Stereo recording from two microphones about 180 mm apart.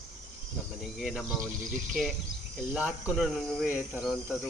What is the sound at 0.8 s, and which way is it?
Speech, centre (ahead or behind).